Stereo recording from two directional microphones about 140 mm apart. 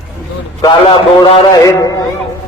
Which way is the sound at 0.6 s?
35° left (ahead or behind).